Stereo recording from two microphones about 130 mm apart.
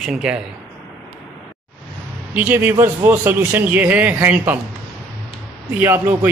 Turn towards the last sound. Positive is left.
turn(degrees=-15)  # may be behind; listen again after turning